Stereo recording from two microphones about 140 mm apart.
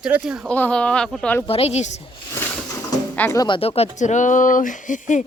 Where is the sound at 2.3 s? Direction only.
15° left (ahead or behind).